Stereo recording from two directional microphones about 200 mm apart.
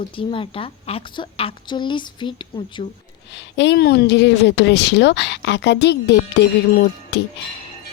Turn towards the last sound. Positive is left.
turn(degrees=60)  # may be behind; listen again after turning